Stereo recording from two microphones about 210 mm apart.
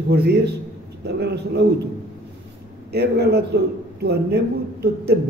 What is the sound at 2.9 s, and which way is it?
Speech, 50° right (ahead or behind).